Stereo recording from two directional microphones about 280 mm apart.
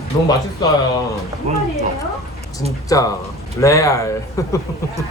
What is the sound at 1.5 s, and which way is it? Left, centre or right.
Speech, right.